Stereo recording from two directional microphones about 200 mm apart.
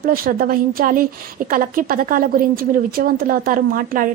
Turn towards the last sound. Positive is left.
turn(degrees=-45)  # may be behind; listen again after turning